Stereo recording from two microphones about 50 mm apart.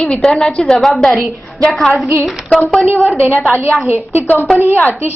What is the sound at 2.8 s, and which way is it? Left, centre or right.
Speech, right.